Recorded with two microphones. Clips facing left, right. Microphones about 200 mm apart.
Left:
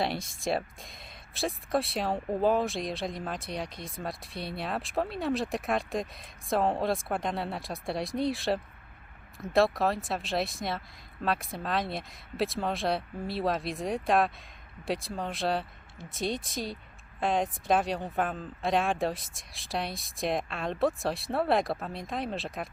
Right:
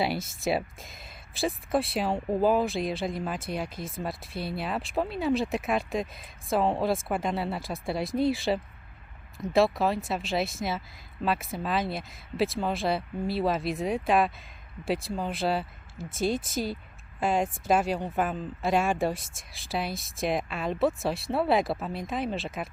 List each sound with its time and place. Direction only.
0.0 s speech: 5° right (ahead or behind)